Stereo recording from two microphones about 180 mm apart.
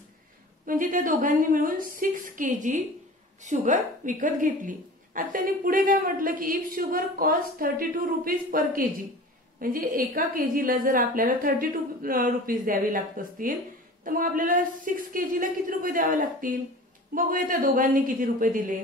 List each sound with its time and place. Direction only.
0.7 s a woman's voice: 50° right (ahead or behind)